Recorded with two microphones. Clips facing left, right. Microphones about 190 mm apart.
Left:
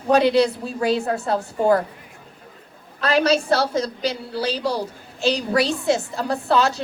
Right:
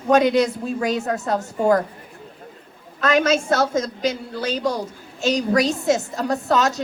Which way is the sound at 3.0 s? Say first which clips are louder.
Even; 35° left (ahead or behind).